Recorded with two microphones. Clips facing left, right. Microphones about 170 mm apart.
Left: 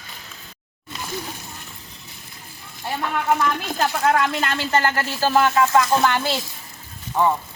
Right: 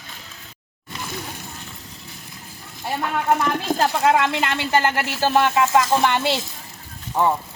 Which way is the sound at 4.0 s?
20° right (ahead or behind).